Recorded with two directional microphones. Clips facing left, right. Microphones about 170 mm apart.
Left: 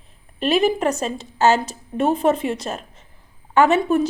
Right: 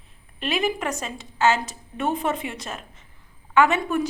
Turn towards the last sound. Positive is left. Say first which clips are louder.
# left 4 dB
turn(degrees=30)  # may be behind; listen again after turning